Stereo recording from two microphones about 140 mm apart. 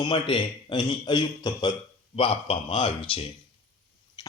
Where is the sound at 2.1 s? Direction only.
45° left (ahead or behind).